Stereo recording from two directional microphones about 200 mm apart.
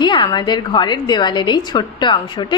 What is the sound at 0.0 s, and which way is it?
A woman's voice, 25° left (ahead or behind).